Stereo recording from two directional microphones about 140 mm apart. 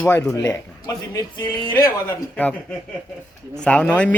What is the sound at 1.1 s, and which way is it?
Speech, 30° left (ahead or behind).